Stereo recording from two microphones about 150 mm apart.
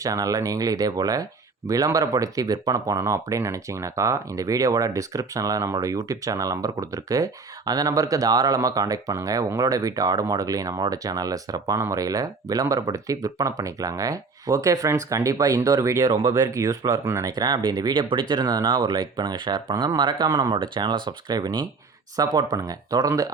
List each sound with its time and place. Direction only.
0.0 s speech: 25° right (ahead or behind)